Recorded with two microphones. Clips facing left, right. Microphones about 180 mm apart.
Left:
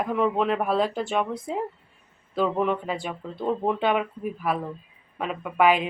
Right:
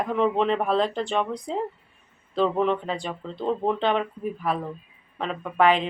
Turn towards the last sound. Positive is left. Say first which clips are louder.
# even
turn(degrees=5)  # may be behind; listen again after turning